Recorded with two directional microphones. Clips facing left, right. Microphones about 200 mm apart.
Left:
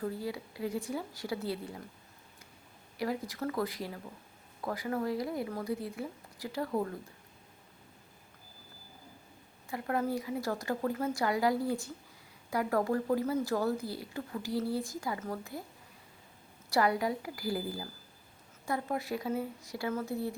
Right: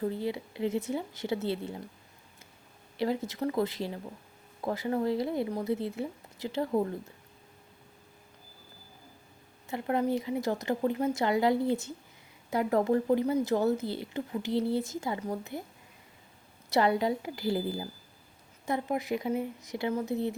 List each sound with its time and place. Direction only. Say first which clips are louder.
0.0 s a woman's voice: right 4 dB; 25° right (ahead or behind)
3.0 s a woman's voice: right 4 dB; 25° right (ahead or behind)
9.6 s a woman's voice: right 4 dB; 20° right (ahead or behind)
16.6 s a woman's voice: right 3 dB; 25° right (ahead or behind)